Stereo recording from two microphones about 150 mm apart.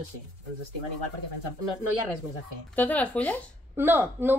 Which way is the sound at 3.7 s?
15° right (ahead or behind).